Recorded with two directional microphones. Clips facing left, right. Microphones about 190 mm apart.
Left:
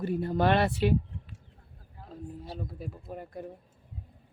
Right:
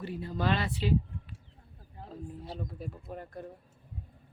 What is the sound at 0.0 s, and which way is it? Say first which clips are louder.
Speech: left 6 dB; 55° left (ahead or behind).